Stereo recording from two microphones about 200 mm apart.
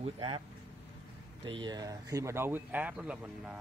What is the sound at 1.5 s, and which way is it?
A man's voice, 25° right (ahead or behind).